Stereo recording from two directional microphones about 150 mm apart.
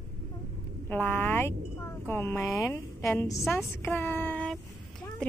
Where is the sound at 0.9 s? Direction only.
15° left (ahead or behind).